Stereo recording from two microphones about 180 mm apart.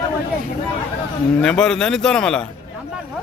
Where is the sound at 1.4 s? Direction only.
5° left (ahead or behind).